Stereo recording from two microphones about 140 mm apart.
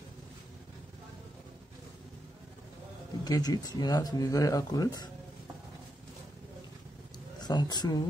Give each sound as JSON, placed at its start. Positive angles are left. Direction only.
{"t": 3.3, "sound": "speech", "side_deg": 25}
{"t": 7.3, "sound": "speech", "side_deg": 30}